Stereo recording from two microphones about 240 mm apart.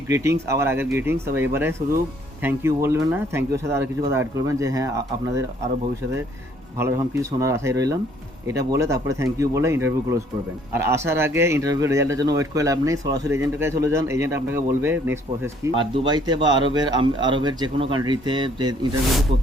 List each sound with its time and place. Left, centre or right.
0.1 s a man's voice: centre
6.7 s a man's voice: centre